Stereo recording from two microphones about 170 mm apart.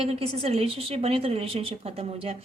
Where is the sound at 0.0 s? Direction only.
35° right (ahead or behind).